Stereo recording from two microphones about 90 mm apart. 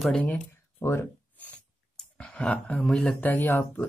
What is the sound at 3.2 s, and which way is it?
Speech, 20° left (ahead or behind).